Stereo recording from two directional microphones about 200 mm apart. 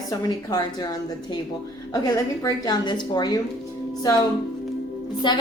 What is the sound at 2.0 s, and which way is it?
A woman's voice, 20° left (ahead or behind).